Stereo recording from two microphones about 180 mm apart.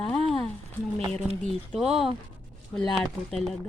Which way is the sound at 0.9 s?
35° right (ahead or behind).